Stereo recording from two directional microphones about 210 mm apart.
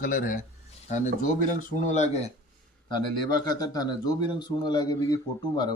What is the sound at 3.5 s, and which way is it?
A man's voice, 20° left (ahead or behind).